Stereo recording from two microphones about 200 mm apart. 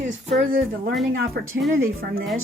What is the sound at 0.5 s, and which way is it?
Speech, 45° right (ahead or behind).